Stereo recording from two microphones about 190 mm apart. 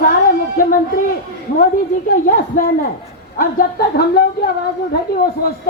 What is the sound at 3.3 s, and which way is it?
Speech, 50° left (ahead or behind).